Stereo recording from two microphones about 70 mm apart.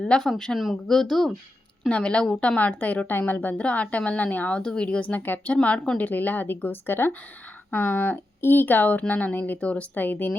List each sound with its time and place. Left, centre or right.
0.0 s a woman's voice: centre; by 10.3 s left